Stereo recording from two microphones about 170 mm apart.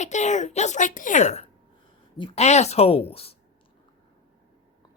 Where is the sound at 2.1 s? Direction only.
30° left (ahead or behind).